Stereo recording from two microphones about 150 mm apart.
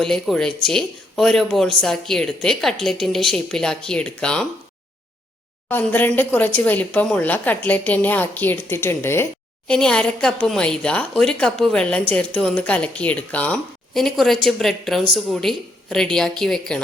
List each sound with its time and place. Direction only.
0.0 s a woman's voice: 5° left (ahead or behind)
5.6 s a woman's voice: 10° left (ahead or behind)
9.6 s a woman's voice: 5° left (ahead or behind)